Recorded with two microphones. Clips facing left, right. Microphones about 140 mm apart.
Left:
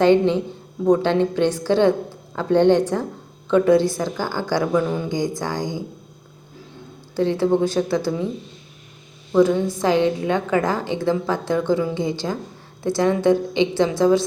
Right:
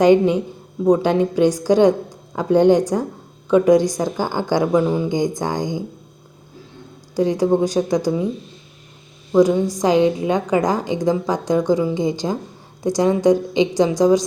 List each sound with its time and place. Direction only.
0.0 s a woman's voice: 15° right (ahead or behind)
7.2 s a woman's voice: 15° right (ahead or behind)
9.3 s a woman's voice: 15° right (ahead or behind)